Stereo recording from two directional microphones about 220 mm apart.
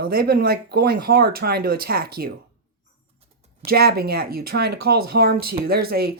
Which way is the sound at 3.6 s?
45° right (ahead or behind).